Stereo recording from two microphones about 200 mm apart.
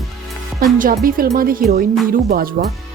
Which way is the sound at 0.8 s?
45° right (ahead or behind).